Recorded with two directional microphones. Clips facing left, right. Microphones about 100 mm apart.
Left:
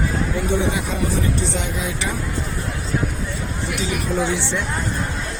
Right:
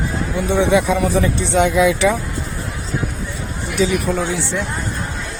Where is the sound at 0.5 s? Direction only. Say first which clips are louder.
Right 11 dB; 80° right.